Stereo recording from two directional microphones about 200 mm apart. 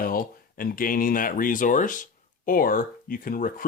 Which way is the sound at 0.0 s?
45° left (ahead or behind).